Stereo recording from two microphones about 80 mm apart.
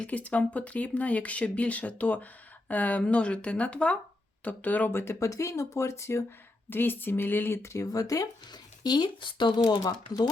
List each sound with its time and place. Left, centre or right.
0.0 s speech: centre; by 6.2 s left
6.7 s speech: left
8.8 s speech: left
9.6 s speech: left